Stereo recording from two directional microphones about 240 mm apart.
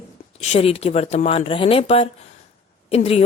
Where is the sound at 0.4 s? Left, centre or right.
Left.